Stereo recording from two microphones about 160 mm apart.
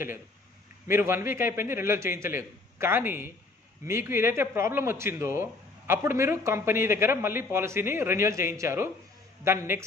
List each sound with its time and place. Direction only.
0.8 s a man's voice: 15° right (ahead or behind)